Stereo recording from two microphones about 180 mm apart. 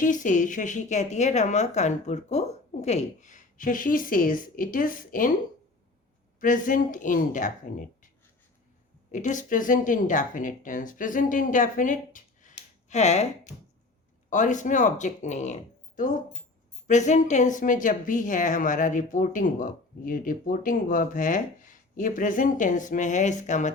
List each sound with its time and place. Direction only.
0.0 s speech: 45° left (ahead or behind)
6.4 s speech: 45° left (ahead or behind)
9.1 s speech: 45° left (ahead or behind)
16.8 s speech: 40° left (ahead or behind)